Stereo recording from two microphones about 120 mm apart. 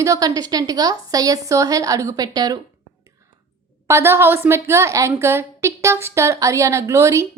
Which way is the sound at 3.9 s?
20° right (ahead or behind).